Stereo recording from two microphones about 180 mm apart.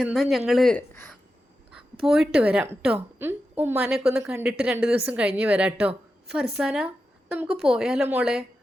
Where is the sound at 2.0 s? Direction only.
Centre (ahead or behind).